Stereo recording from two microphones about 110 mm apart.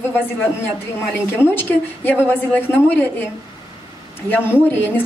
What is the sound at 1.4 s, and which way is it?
A woman's voice, 20° left (ahead or behind).